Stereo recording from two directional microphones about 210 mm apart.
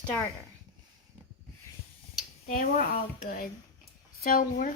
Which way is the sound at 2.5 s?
40° left (ahead or behind).